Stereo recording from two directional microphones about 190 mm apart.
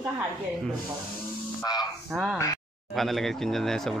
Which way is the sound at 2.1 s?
Centre (ahead or behind).